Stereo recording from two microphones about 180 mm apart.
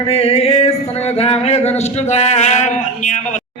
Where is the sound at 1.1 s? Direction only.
35° left (ahead or behind).